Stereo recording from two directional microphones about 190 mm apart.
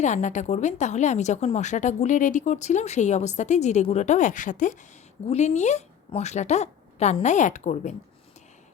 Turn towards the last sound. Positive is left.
turn(degrees=40)  # may be behind; listen again after turning